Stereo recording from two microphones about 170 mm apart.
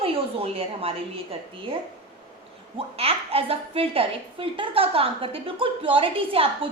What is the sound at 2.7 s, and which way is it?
A woman's voice, 35° right (ahead or behind).